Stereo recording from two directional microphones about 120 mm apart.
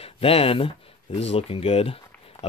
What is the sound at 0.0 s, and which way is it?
Speech, 55° left (ahead or behind).